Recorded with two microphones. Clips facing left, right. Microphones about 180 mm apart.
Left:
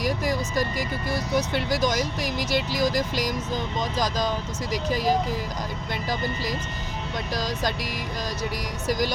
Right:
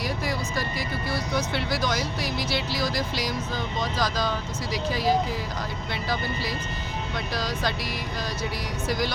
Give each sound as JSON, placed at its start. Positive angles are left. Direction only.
{"t": 0.0, "sound": "speech", "side_deg": 40}
{"t": 4.7, "sound": "speech", "side_deg": 45}
{"t": 7.3, "sound": "speech", "side_deg": 40}
{"t": 8.9, "sound": "speech", "side_deg": 40}